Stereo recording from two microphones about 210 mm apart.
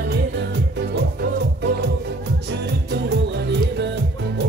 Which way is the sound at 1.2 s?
50° right (ahead or behind).